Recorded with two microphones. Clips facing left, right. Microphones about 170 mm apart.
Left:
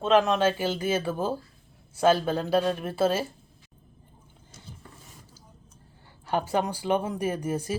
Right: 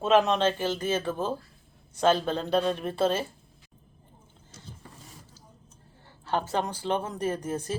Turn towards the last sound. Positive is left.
turn(degrees=10)  # may be behind; listen again after turning